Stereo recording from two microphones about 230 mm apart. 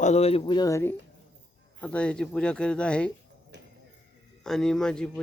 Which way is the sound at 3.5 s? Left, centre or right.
Right.